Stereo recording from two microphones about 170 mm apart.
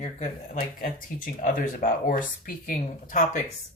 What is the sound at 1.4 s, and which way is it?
Speech, 50° left (ahead or behind).